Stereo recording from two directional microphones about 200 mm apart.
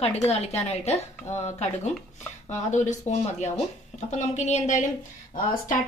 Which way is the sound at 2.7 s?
35° left (ahead or behind).